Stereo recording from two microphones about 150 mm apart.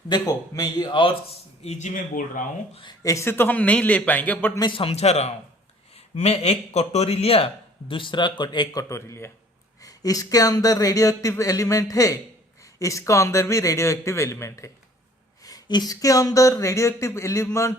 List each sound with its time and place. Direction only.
0.1 s speech: 25° left (ahead or behind)
1.6 s speech: 50° left (ahead or behind)
3.0 s a man's voice: 20° left (ahead or behind)
4.6 s a man's voice: 35° left (ahead or behind); by 17.7 s 20° left (ahead or behind)